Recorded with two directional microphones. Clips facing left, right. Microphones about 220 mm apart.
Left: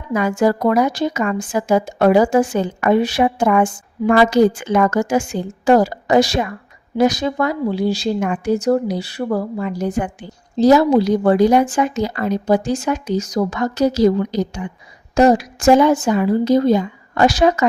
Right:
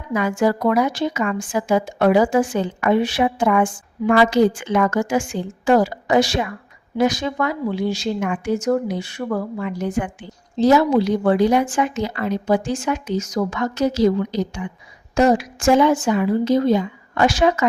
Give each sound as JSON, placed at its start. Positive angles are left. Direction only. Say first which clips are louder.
{"t": 0.1, "sound": "speech", "louder": "left 2 dB", "side_deg": 40}